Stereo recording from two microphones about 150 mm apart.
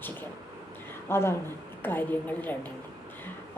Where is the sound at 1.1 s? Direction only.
15° left (ahead or behind).